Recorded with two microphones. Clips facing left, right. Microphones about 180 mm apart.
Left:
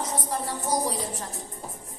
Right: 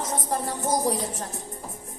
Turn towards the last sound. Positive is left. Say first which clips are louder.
# right 3 dB
turn(degrees=-45)  # may be behind; listen again after turning